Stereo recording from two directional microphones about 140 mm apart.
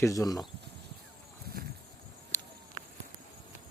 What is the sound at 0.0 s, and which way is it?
Speech, 25° left (ahead or behind).